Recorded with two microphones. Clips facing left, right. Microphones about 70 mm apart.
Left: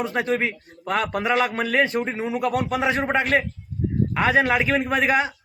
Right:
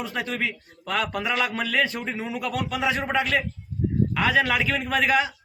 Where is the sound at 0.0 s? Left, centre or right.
Left.